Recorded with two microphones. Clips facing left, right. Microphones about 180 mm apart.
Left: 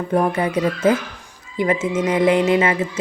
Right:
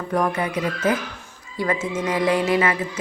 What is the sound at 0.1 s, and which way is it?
A woman's voice, 30° left (ahead or behind).